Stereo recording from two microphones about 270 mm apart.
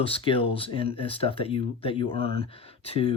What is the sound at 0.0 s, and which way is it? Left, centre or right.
Speech, centre.